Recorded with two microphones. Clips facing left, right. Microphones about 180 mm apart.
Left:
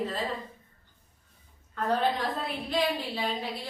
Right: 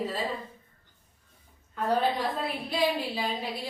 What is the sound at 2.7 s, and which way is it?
Speech, 10° right (ahead or behind).